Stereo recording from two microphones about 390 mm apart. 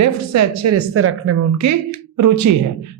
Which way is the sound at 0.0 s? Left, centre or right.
Right.